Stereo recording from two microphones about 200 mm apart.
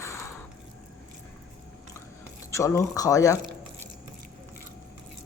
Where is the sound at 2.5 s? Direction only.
15° left (ahead or behind).